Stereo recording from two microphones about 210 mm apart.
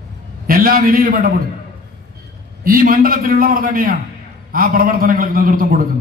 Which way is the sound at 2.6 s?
45° right (ahead or behind).